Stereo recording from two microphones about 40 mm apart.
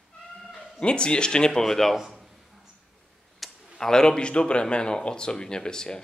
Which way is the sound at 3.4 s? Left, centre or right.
Centre.